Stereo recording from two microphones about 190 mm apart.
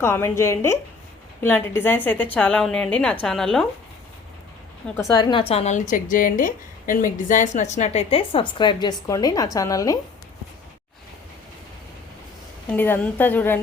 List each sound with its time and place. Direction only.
0.0 s a woman's voice: 15° left (ahead or behind)
4.9 s a woman's voice: 20° left (ahead or behind)
12.6 s a woman's voice: 10° left (ahead or behind)